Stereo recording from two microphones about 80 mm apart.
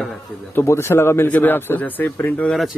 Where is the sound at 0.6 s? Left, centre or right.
Left.